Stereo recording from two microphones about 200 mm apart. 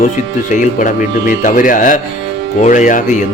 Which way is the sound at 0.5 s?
40° left (ahead or behind).